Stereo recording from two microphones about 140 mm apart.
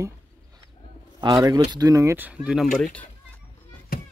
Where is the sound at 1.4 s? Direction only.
30° right (ahead or behind).